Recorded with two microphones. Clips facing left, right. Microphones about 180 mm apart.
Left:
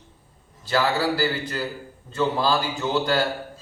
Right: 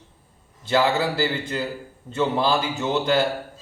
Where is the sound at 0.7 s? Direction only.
25° right (ahead or behind).